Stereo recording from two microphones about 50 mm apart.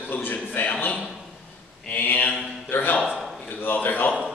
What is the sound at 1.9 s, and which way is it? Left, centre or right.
A man's voice, left.